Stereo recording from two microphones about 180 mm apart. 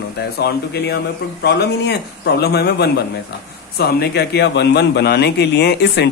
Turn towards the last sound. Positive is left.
turn(degrees=65)  # may be behind; listen again after turning